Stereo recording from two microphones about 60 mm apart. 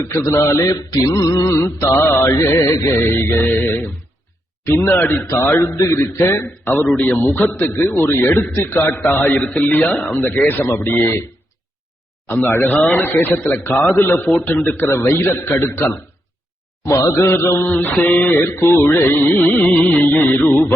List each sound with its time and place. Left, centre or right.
0.2 s a man's voice: left
0.4 s a man's voice: left
0.7 s music: left
1.5 s a man's voice: left
2.6 s mantra: left
3.0 s a man's voice: left
4.9 s a man's voice: left
6.9 s a man's voice: left
10.2 s a man's voice: left
12.3 s a man's voice: left
16.8 s a man's voice: left
17.7 s a man's voice: left